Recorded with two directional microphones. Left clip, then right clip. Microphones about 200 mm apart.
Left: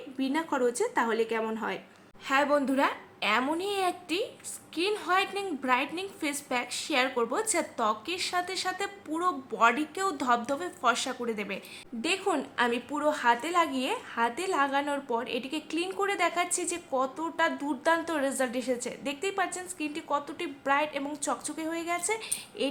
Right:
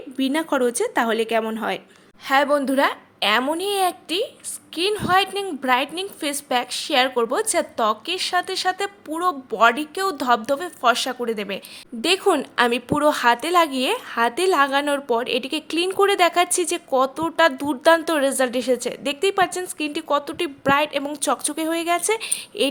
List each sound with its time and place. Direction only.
0.2 s a woman's voice: 40° right (ahead or behind)